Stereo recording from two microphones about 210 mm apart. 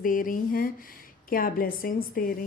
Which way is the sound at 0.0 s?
40° left (ahead or behind).